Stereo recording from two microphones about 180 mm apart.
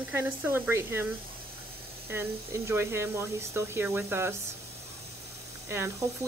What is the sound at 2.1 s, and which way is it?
Speech, 15° right (ahead or behind).